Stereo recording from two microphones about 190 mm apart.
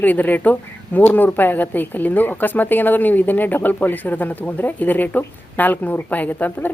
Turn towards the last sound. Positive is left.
turn(degrees=10)  # may be behind; listen again after turning